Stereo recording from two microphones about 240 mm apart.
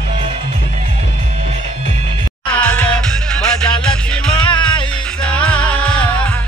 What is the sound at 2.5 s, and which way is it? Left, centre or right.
Music, centre.